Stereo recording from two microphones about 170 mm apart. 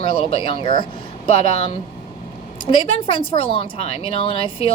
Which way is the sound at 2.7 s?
30° left (ahead or behind).